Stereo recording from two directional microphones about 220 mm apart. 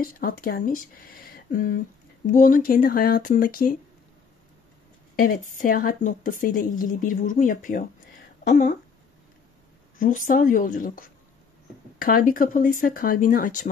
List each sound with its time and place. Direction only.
0.0 s a woman's voice: 40° left (ahead or behind)
5.1 s a woman's voice: 40° left (ahead or behind)
9.9 s a woman's voice: 35° left (ahead or behind)